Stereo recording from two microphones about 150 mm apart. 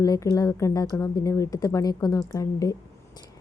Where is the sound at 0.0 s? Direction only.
20° left (ahead or behind).